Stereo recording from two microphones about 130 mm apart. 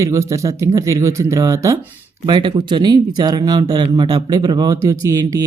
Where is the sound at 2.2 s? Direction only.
35° right (ahead or behind).